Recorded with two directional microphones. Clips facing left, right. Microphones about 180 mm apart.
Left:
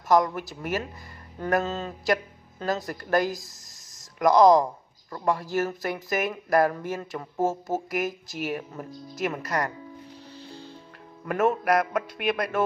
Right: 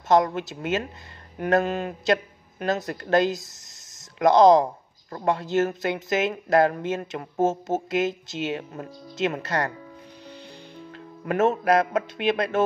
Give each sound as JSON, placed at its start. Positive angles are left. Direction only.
{"t": 0.1, "sound": "speech", "side_deg": -25}
{"t": 1.4, "sound": "a sound", "side_deg": -15}
{"t": 2.6, "sound": "speech", "side_deg": -25}
{"t": 10.3, "sound": "music", "side_deg": -20}
{"t": 11.2, "sound": "speech", "side_deg": -25}